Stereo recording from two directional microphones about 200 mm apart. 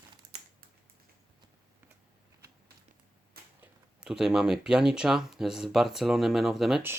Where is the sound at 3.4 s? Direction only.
50° right (ahead or behind).